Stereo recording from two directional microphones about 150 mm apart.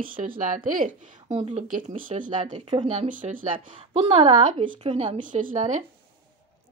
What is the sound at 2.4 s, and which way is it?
Speech, 35° right (ahead or behind).